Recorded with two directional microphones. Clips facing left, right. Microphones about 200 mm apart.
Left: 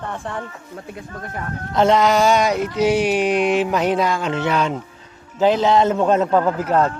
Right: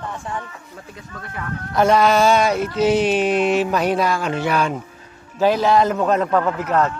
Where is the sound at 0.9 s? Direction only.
45° left (ahead or behind).